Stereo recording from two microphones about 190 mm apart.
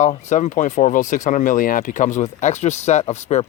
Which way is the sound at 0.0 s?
40° left (ahead or behind).